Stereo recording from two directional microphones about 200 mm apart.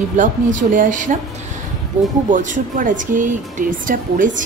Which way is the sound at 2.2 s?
40° right (ahead or behind).